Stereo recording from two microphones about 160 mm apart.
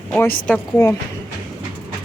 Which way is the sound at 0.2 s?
10° left (ahead or behind).